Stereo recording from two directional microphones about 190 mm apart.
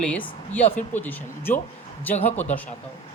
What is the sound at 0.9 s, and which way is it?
Speech, 10° left (ahead or behind).